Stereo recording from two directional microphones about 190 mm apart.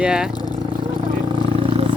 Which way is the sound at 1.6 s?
30° right (ahead or behind).